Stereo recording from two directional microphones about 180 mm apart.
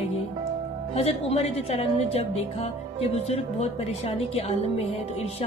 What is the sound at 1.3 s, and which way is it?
Speech, 35° left (ahead or behind).